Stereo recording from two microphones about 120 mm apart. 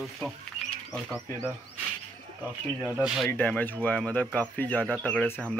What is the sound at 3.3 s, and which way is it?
Speech, 15° left (ahead or behind).